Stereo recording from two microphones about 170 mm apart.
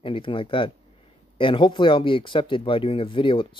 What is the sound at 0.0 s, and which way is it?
Speech, 30° left (ahead or behind).